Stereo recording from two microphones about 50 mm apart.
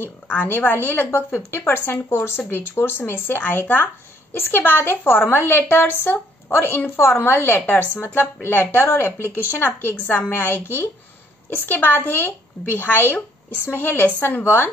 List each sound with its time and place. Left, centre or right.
0.0 s speech: left